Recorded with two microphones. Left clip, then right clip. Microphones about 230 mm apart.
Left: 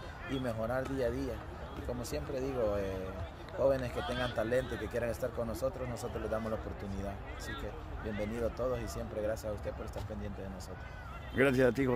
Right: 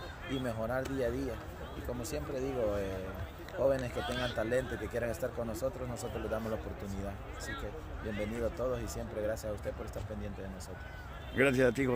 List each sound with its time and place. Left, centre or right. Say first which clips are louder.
0.3 s speech: even; centre
4.0 s speech: even; right
4.4 s speech: left 1 dB; centre
8.2 s speech: even; centre
11.3 s speech: even; centre